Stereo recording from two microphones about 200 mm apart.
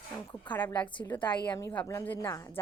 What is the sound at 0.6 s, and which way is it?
Speech, 20° left (ahead or behind).